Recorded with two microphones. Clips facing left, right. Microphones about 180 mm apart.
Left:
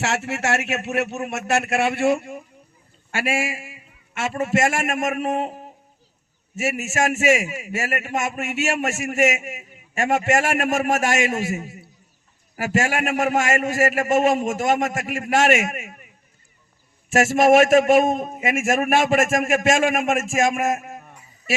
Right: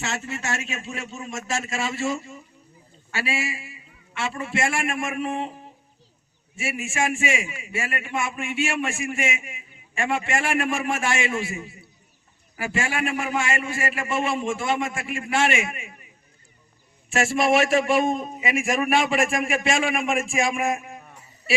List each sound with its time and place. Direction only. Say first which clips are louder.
0.0 s a man's voice: left 6 dB; 75° left (ahead or behind); by 16.0 s 45° left (ahead or behind)
17.1 s a man's voice: left 6 dB; 45° left (ahead or behind)